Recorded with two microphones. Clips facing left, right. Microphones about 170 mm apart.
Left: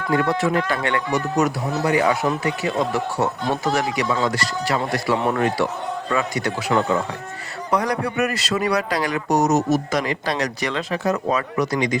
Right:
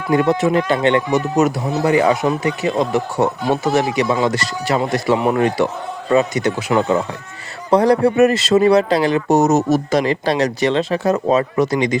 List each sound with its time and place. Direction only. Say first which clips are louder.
0.1 s speech: right 5 dB; 20° right (ahead or behind)
4.1 s speech: right 4 dB; 10° right (ahead or behind)